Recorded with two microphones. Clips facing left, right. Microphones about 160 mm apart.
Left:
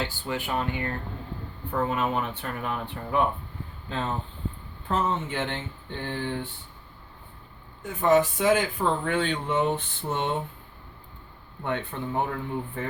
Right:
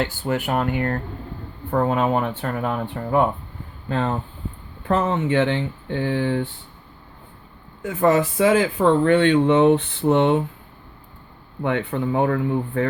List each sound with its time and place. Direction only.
0.0 s speech: 50° right (ahead or behind)
0.4 s speech: 60° right (ahead or behind); by 6.4 s 80° right
7.8 s speech: 85° right
11.6 s speech: 75° right (ahead or behind)